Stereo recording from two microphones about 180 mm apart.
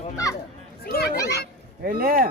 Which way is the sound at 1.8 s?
55° right (ahead or behind).